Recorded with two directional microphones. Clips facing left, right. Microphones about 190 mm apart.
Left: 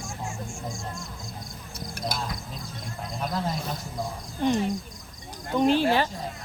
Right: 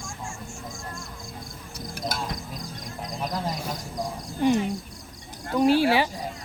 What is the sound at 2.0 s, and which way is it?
Speech, centre (ahead or behind).